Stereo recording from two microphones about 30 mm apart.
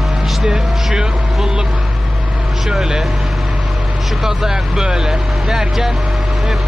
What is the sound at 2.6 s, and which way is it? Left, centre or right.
Speech, centre.